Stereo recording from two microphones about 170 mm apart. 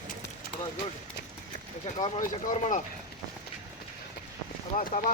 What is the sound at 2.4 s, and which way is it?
Speech, 45° left (ahead or behind).